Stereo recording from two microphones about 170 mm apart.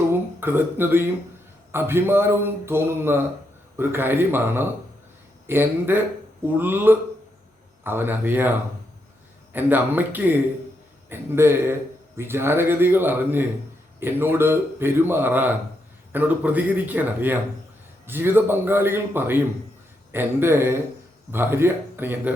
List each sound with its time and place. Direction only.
0.1 s a man's voice: 15° right (ahead or behind)